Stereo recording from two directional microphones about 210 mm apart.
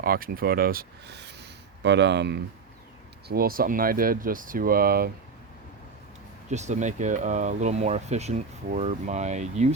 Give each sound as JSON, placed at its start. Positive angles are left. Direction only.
{"t": 0.0, "sound": "speech", "side_deg": -45}
{"t": 6.5, "sound": "speech", "side_deg": -35}